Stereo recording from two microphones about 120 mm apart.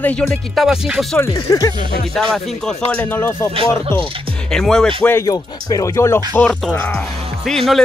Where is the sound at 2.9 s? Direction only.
15° left (ahead or behind).